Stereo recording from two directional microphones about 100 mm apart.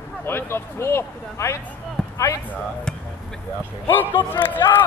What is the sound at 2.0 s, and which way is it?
Basketball bounce, 5° left (ahead or behind).